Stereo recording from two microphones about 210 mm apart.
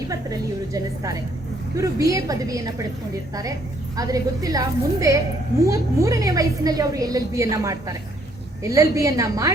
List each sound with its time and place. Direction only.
0.1 s a woman's voice: 15° right (ahead or behind)
3.9 s a woman's voice: 15° right (ahead or behind)